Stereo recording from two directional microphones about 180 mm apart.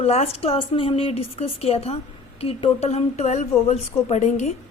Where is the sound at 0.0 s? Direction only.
35° left (ahead or behind).